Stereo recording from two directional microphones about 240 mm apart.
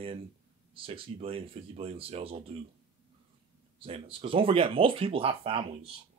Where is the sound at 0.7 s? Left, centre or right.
Right.